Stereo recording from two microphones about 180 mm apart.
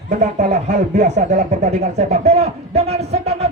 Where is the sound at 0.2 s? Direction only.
40° right (ahead or behind).